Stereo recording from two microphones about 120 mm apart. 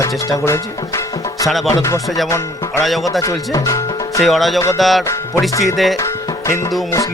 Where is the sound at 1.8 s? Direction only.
30° left (ahead or behind).